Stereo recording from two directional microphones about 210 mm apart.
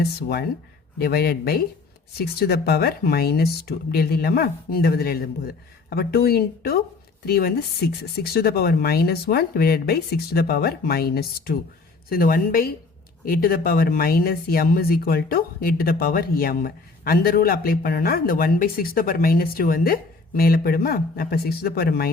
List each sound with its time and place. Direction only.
0.0 s speech: 50° left (ahead or behind)